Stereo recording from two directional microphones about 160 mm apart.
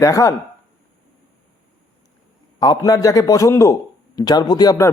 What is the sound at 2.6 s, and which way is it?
A man's voice, 25° left (ahead or behind).